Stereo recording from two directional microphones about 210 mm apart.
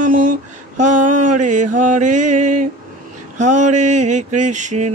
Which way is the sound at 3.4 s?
35° right (ahead or behind).